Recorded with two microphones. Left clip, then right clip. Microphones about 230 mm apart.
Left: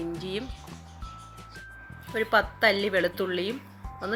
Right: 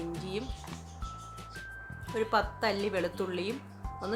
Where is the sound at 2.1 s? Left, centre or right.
Centre.